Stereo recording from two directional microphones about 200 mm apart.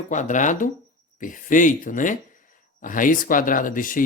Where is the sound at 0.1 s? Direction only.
40° left (ahead or behind).